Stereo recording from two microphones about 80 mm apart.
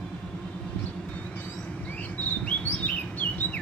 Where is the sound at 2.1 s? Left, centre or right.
Centre.